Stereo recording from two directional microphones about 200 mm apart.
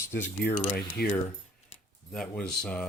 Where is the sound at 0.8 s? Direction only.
50° left (ahead or behind).